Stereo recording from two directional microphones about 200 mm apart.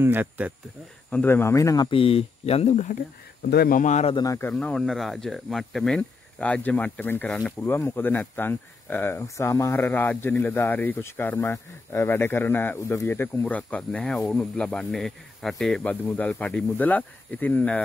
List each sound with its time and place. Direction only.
0.0 s speech: 10° right (ahead or behind)
1.1 s speech: 10° left (ahead or behind); by 3.0 s 35° left (ahead or behind)
3.4 s speech: 50° left (ahead or behind); by 4.2 s 35° left (ahead or behind)
4.2 s speech: 15° left (ahead or behind)